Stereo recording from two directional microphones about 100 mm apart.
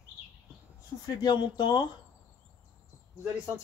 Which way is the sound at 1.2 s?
50° left (ahead or behind).